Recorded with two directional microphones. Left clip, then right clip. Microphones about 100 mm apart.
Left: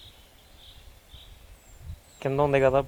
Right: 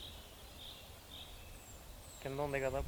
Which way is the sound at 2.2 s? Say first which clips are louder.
Left 16 dB; 20° left (ahead or behind).